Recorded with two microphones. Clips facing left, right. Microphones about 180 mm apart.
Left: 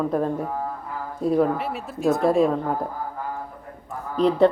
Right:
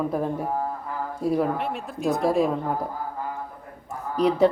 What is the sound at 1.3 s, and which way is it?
Speech, centre (ahead or behind).